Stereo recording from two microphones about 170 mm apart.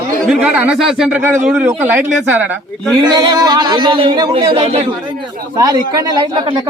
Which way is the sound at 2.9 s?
25° right (ahead or behind).